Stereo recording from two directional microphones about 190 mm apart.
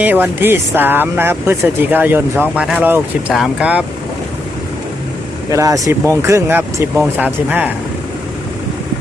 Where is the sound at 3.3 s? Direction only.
5° right (ahead or behind).